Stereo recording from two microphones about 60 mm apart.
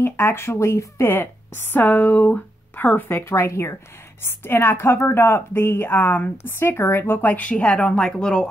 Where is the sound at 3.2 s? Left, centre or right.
Left.